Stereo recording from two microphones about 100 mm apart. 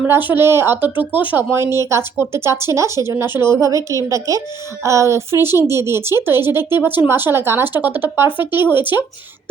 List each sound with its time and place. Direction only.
0.1 s a child's voice: 20° right (ahead or behind)